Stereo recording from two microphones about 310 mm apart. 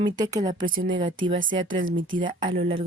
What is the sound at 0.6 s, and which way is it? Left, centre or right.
Speech, right.